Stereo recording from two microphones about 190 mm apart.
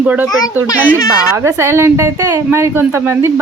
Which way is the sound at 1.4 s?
15° right (ahead or behind).